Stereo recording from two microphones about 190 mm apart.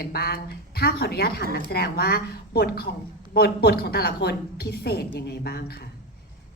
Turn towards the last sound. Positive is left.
turn(degrees=55)  # may be behind; listen again after turning